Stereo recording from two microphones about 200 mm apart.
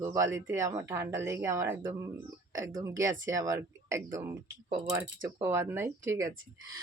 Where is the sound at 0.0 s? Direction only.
15° right (ahead or behind).